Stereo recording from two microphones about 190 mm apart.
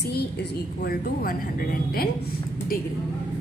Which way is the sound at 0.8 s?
50° left (ahead or behind).